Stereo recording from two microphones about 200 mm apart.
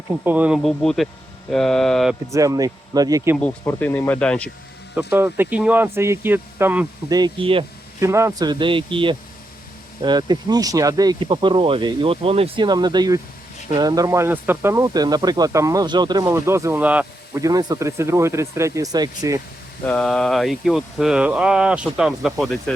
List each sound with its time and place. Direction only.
0.3 s speech: 5° right (ahead or behind)
2.3 s speech: 15° right (ahead or behind)
3.3 s speech: 10° left (ahead or behind)
5.1 s speech: 10° right (ahead or behind)
7.2 s speech: 25° right (ahead or behind)
7.9 s speech: 15° right (ahead or behind)
19.9 s speech: 5° left (ahead or behind)